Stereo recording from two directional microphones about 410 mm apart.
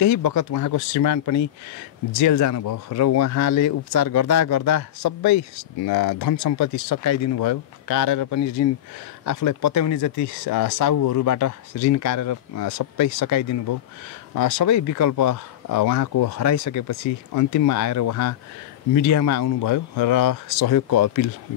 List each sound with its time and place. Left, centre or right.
0.0 s speech: left
19.6 s speech: left